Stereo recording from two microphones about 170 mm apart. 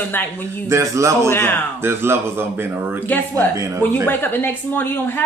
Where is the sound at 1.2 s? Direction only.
10° left (ahead or behind).